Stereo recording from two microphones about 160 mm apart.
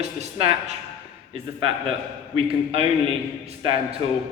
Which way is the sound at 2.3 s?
35° right (ahead or behind).